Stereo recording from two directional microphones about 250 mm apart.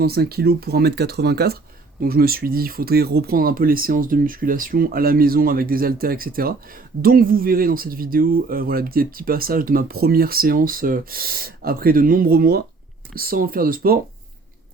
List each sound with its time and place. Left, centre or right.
0.0 s speech: right